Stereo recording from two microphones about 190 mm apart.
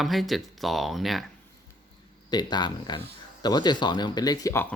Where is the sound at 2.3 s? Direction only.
20° left (ahead or behind).